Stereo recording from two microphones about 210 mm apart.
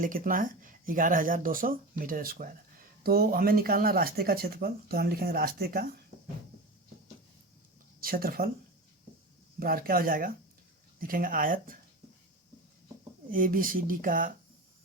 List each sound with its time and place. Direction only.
0.0 s speech: 40° right (ahead or behind)
8.0 s speech: 45° right (ahead or behind)
9.6 s speech: 45° right (ahead or behind)
13.3 s speech: 40° right (ahead or behind)